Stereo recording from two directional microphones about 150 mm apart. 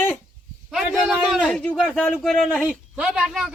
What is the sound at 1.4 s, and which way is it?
A man's voice, 10° left (ahead or behind).